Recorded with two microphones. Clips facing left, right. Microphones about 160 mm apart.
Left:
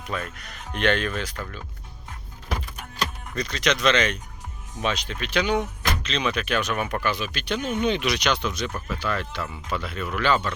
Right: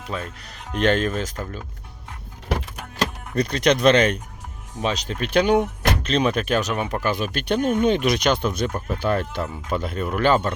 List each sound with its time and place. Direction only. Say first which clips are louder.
0.0 s speech: right 1 dB; 30° right (ahead or behind)
3.3 s speech: right 6 dB; 55° right (ahead or behind)
4.8 s speech: right 3 dB; 35° right (ahead or behind)
7.0 s speech: right 4 dB; 50° right (ahead or behind)